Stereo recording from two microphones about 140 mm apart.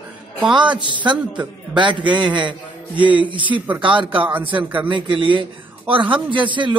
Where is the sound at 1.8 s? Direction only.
35° right (ahead or behind).